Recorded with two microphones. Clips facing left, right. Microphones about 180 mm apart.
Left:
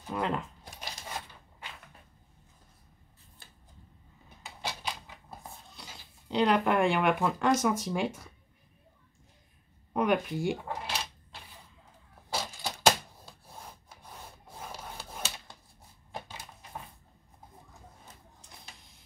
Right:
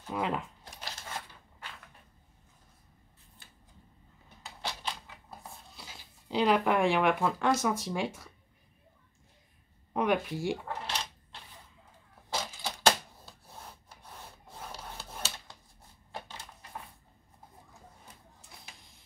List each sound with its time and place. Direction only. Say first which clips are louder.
0.1 s speech: left 1 dB; 5° right (ahead or behind)
0.7 s a sound: left 1 dB; 15° left (ahead or behind)
3.4 s a sound: left 3 dB; 35° left (ahead or behind)
4.6 s typewriter: left 1 dB; 10° left (ahead or behind)
5.8 s speech: left 1 dB; 5° right (ahead or behind)
9.9 s speech: left 1 dB; centre (ahead or behind)
10.6 s a sound: left 1 dB; 10° left (ahead or behind)
12.3 s typewriter: left 1 dB; 10° left (ahead or behind)
14.0 s rub: left 1 dB; 10° left (ahead or behind)